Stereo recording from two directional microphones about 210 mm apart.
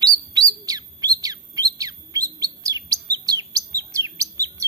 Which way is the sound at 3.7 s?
15° right (ahead or behind).